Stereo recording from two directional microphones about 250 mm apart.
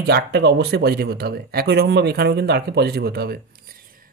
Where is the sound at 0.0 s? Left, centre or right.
Right.